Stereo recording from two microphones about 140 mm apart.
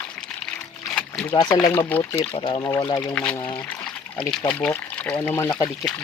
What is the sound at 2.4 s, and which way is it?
Speech, 25° left (ahead or behind).